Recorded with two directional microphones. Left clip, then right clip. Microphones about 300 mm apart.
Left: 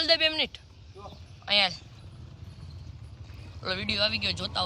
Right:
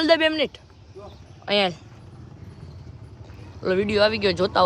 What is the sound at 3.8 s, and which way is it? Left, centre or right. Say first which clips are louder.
Speech: right 8 dB; centre.